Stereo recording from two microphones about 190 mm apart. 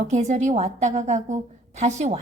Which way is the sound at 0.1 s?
35° right (ahead or behind).